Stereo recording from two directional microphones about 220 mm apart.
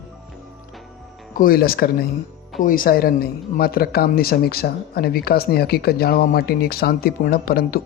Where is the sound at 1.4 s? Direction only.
40° left (ahead or behind).